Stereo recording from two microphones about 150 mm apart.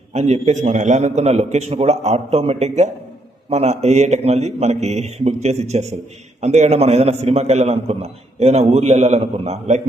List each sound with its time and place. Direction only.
0.1 s a man's voice: 50° right (ahead or behind)